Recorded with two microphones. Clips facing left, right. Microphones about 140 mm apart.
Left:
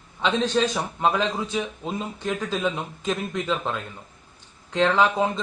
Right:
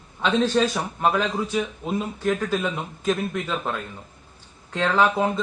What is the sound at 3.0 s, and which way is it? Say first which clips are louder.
Speech: right 3 dB; 5° right (ahead or behind).